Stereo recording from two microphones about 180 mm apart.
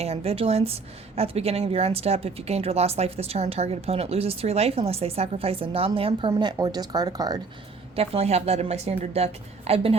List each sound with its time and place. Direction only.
0.0 s a woman's voice: 35° right (ahead or behind)
7.9 s a woman's voice: 35° right (ahead or behind)